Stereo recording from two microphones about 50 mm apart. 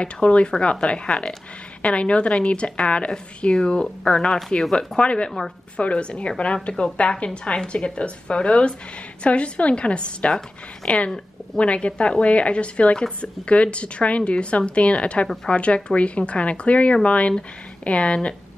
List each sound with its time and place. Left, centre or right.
0.0 s a woman's voice: left
4.7 s a woman's voice: centre